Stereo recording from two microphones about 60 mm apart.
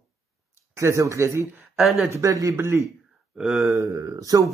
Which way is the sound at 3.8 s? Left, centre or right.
Right.